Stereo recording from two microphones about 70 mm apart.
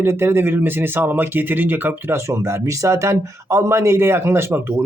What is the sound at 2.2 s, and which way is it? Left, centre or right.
Speech, right.